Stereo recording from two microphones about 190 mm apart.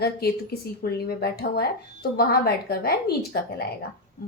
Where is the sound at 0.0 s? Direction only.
55° left (ahead or behind).